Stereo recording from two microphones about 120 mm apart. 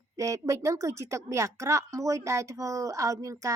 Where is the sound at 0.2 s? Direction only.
30° right (ahead or behind).